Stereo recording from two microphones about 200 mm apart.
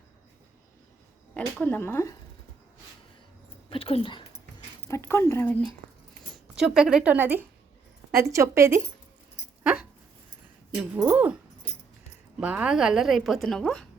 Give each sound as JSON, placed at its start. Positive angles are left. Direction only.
{"t": 1.3, "sound": "speech", "side_deg": 5}
{"t": 3.7, "sound": "speech", "side_deg": 30}
{"t": 4.9, "sound": "speech", "side_deg": 10}
{"t": 6.3, "sound": "a woman's voice", "side_deg": -5}
{"t": 10.8, "sound": "a woman's voice", "side_deg": -5}